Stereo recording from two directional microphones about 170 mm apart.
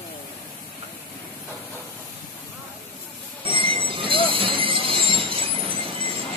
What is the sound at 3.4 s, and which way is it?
Train, 30° right (ahead or behind).